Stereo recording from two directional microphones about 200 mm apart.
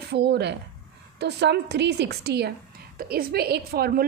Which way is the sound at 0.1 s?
55° right (ahead or behind).